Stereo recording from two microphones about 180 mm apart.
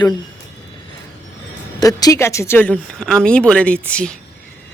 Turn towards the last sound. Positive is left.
turn(degrees=5)  # may be behind; listen again after turning